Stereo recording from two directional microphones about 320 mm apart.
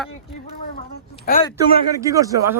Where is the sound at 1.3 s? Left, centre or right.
Left.